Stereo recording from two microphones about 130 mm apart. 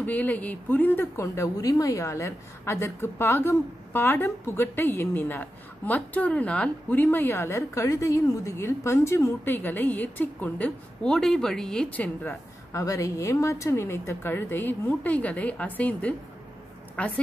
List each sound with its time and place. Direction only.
0.0 s a woman's voice: 10° left (ahead or behind)
12.7 s a woman's voice: 25° left (ahead or behind)